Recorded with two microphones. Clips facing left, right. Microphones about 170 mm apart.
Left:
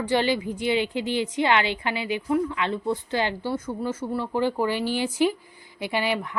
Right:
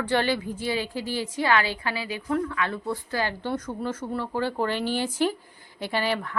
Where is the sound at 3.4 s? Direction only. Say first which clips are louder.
Left 1 dB; 10° left (ahead or behind).